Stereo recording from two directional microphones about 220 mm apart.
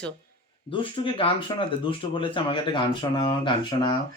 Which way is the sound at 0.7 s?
25° left (ahead or behind).